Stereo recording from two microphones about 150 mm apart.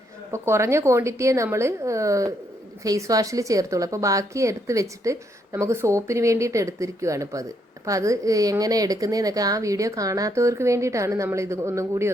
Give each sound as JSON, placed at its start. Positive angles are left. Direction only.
{"t": 0.3, "sound": "speech", "side_deg": -20}